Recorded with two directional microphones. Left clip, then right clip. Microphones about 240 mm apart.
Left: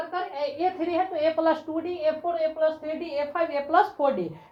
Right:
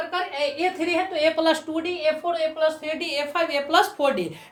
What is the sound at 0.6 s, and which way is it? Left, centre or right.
A woman's voice, right.